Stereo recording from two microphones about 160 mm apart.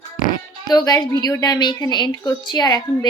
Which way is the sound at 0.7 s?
25° left (ahead or behind).